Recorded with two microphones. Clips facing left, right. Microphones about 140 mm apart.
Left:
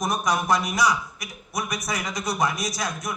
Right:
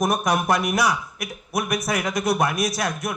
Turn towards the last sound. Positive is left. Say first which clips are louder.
# right 4 dB
turn(degrees=-60)  # may be behind; listen again after turning